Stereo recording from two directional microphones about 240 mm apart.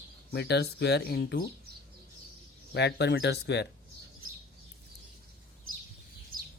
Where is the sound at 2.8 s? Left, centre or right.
Left.